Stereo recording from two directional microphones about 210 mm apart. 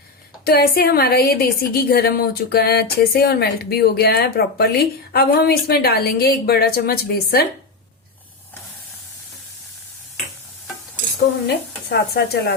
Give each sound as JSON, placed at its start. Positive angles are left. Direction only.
{"t": 0.4, "sound": "a woman's voice", "side_deg": 45}
{"t": 11.4, "sound": "speech", "side_deg": 50}